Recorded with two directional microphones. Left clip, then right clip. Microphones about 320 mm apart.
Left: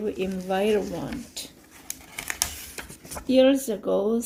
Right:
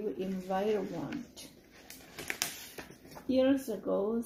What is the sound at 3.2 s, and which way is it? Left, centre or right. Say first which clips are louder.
Speech: left 10 dB; left.